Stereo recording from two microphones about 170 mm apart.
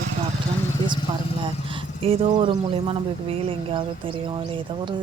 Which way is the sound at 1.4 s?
30° right (ahead or behind).